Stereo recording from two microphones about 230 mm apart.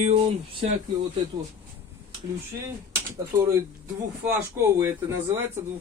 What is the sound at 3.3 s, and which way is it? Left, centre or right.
Speech, centre.